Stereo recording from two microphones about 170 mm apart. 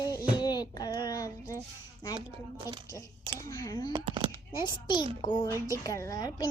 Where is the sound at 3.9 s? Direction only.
25° right (ahead or behind).